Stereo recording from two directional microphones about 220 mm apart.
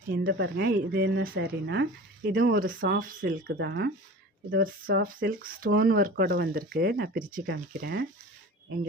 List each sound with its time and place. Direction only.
0.1 s speech: 45° right (ahead or behind)